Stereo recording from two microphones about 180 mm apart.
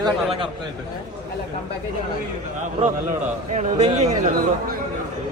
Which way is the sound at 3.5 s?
40° right (ahead or behind).